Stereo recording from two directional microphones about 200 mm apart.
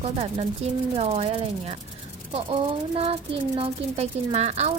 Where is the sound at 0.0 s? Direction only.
30° right (ahead or behind).